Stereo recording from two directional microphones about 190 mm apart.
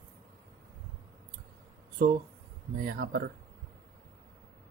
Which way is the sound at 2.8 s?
55° right (ahead or behind).